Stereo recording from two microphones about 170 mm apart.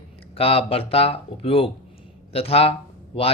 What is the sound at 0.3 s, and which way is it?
Speech, 35° left (ahead or behind).